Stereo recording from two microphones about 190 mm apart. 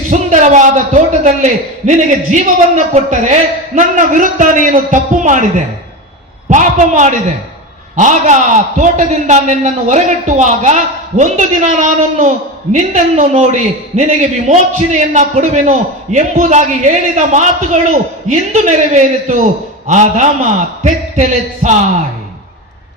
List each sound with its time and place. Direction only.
0.1 s a man's voice: 40° right (ahead or behind)
6.5 s a man's voice: 40° right (ahead or behind)